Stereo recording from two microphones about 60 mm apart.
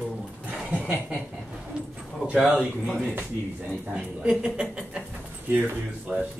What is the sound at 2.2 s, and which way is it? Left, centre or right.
Speech, centre.